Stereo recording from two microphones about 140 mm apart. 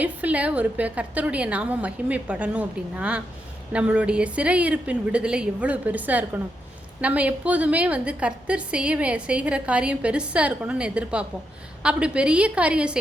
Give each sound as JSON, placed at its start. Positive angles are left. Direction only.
{"t": 0.0, "sound": "a woman's voice", "side_deg": -10}